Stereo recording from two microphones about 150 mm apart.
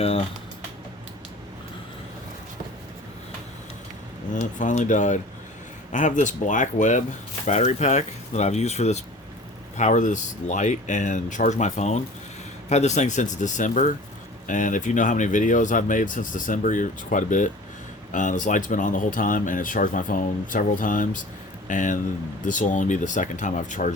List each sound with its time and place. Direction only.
0.0 s speech: 40° left (ahead or behind)
4.4 s speech: 55° left (ahead or behind)